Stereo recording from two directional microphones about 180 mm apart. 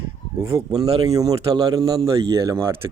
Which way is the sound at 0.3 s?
15° right (ahead or behind).